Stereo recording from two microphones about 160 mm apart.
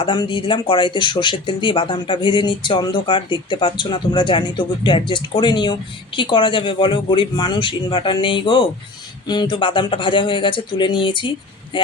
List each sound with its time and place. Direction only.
0.0 s speech: 30° left (ahead or behind)